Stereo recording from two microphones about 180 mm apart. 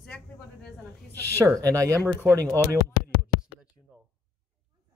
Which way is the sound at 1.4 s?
15° right (ahead or behind).